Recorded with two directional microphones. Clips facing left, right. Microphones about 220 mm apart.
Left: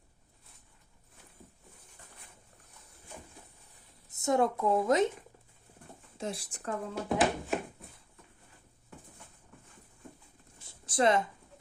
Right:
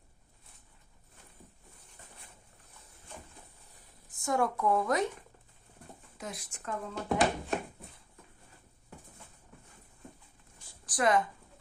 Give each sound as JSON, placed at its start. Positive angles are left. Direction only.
{"t": 4.1, "sound": "speech", "side_deg": 25}
{"t": 6.1, "sound": "speech", "side_deg": 30}
{"t": 6.9, "sound": "speech", "side_deg": 5}
{"t": 10.7, "sound": "a sound", "side_deg": 25}